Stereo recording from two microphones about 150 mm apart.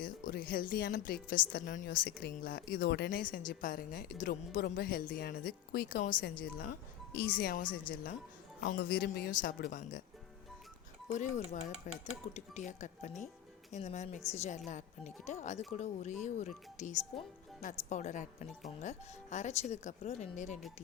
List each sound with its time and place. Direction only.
0.0 s a woman's voice: 70° left (ahead or behind)
7.2 s speech: 85° left; by 7.8 s 65° left (ahead or behind)
8.6 s speech: 90° left
9.1 s a woman's voice: 75° left (ahead or behind)
11.1 s speech: 50° left (ahead or behind)